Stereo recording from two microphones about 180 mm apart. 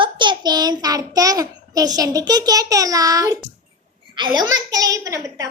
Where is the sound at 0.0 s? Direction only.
25° right (ahead or behind).